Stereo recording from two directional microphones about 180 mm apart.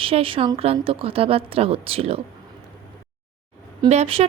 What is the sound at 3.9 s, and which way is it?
Speech, 35° right (ahead or behind).